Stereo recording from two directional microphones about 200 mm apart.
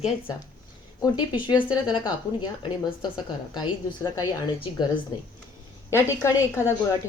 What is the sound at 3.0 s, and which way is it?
A woman's voice, 20° left (ahead or behind).